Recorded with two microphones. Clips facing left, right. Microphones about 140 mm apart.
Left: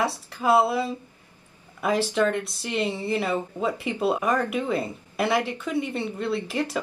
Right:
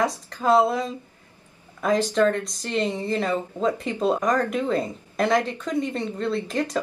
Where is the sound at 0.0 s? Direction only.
10° left (ahead or behind).